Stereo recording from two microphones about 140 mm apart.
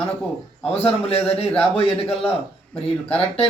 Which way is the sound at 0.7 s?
45° left (ahead or behind).